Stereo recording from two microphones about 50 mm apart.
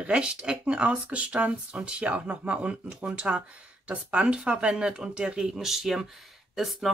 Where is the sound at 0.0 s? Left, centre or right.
Right.